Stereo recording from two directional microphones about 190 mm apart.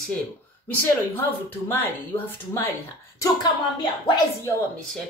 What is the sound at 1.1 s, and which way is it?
A woman's voice, 10° left (ahead or behind).